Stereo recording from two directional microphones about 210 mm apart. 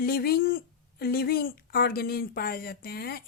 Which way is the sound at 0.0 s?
45° left (ahead or behind).